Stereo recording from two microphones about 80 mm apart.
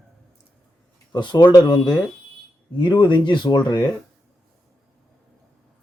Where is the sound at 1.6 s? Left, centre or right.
Left.